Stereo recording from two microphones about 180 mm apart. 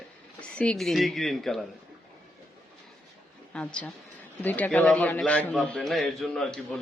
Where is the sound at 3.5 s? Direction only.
5° left (ahead or behind).